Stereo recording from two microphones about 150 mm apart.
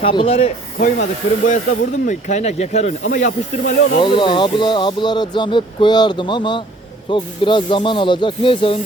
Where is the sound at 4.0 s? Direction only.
30° left (ahead or behind).